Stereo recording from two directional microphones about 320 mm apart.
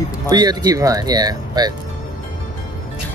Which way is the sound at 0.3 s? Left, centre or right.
Centre.